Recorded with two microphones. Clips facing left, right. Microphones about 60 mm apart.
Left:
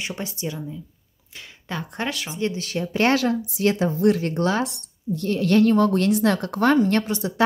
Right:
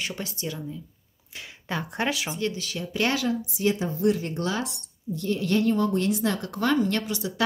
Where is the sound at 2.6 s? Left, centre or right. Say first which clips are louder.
Left 5 dB; left.